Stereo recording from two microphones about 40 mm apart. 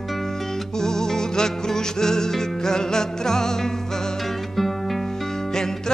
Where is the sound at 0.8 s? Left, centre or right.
Centre.